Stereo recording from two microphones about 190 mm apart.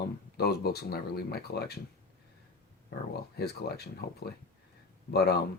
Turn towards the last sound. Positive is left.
turn(degrees=60)  # may be behind; listen again after turning